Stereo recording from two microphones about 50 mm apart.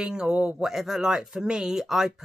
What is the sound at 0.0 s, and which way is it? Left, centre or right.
Speech, centre.